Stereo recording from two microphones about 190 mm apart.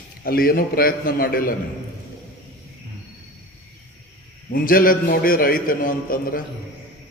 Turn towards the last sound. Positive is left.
turn(degrees=50)  # may be behind; listen again after turning